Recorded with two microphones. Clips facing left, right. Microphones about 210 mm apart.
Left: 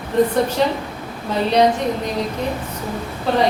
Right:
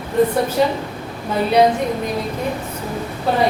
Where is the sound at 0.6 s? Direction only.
5° right (ahead or behind).